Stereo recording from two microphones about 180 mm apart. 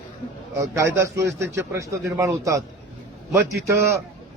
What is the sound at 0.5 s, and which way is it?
A man's voice, 15° right (ahead or behind).